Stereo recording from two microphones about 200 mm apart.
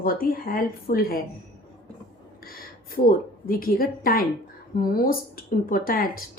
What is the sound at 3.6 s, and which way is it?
Speech, 45° left (ahead or behind).